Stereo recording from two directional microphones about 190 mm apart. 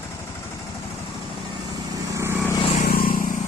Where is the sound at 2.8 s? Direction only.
50° left (ahead or behind).